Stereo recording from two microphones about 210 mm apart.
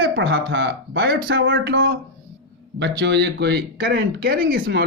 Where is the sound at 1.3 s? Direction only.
65° right (ahead or behind).